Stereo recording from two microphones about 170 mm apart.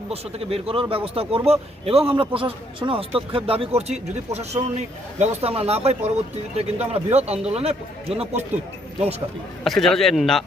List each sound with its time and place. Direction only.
0.1 s speech: 35° right (ahead or behind)
9.6 s speech: centre (ahead or behind)